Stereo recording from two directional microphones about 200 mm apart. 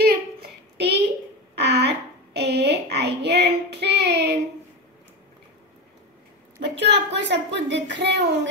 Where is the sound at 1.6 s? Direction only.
55° right (ahead or behind).